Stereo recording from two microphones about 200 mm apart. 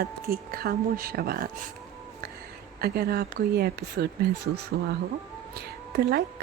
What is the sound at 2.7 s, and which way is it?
Speech, 50° right (ahead or behind).